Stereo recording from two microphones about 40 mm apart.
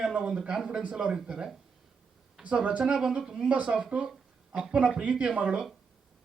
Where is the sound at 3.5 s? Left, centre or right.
Right.